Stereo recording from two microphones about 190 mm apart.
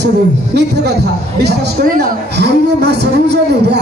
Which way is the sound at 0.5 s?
60° right (ahead or behind).